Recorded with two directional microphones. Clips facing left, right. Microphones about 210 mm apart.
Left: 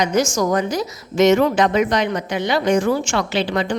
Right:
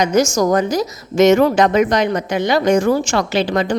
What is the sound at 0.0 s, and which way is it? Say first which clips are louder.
A woman's voice: right 3 dB; 45° right (ahead or behind).